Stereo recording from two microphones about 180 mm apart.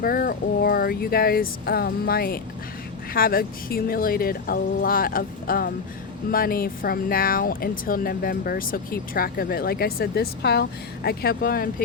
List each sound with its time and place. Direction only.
0.0 s speech: 55° left (ahead or behind)